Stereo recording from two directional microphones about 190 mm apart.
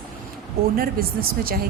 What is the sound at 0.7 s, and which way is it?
Speech, 50° right (ahead or behind).